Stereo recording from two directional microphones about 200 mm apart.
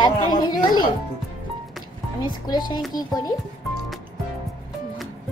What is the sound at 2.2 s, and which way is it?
A child's voice, 20° left (ahead or behind).